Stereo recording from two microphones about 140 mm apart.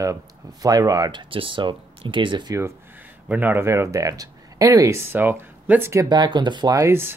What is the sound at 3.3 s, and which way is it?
Speech, 15° right (ahead or behind).